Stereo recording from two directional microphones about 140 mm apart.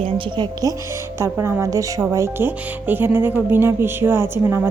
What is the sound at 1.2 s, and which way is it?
Speech, 20° right (ahead or behind).